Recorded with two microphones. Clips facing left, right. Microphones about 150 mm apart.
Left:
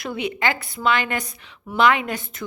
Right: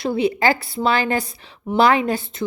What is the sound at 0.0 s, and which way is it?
A woman's voice, 30° right (ahead or behind).